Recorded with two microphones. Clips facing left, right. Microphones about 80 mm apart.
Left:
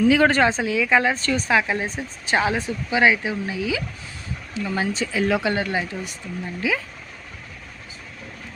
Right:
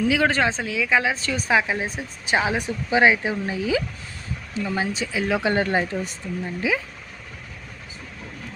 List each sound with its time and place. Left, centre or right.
0.0 s speech: centre
1.5 s speech: centre; by 3.8 s right
4.6 s speech: centre
5.4 s speech: right
6.6 s speech: right